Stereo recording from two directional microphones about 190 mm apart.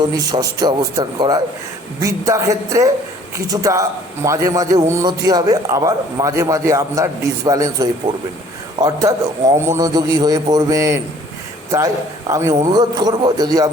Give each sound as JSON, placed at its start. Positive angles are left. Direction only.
{"t": 0.1, "sound": "a man's voice", "side_deg": -20}
{"t": 12.3, "sound": "a man's voice", "side_deg": -15}